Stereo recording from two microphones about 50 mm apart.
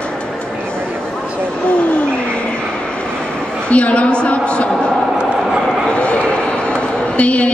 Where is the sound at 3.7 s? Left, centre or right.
Left.